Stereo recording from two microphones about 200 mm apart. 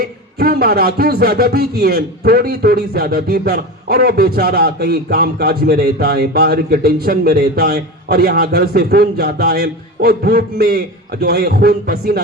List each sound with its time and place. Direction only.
0.0 s a man's voice: 50° right (ahead or behind)